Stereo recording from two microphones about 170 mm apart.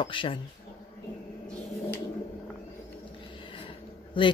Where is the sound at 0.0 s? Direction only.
30° left (ahead or behind).